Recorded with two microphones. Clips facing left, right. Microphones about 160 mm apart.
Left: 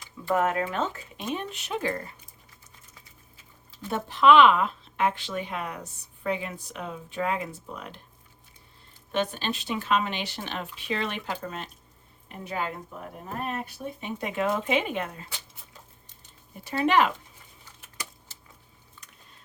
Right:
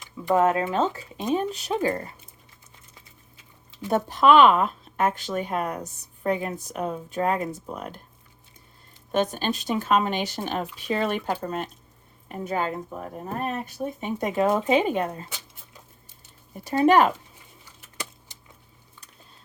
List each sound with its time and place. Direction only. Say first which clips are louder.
0.0 s speech: right 4 dB; 25° right (ahead or behind)
1.3 s speech: right 7 dB; 35° right (ahead or behind)
3.8 s speech: right 1 dB; 45° right (ahead or behind)
9.1 s speech: right 4 dB; 45° right (ahead or behind)
16.6 s speech: right 5 dB; 40° right (ahead or behind)
18.3 s keys jangling: right 1 dB; 15° right (ahead or behind)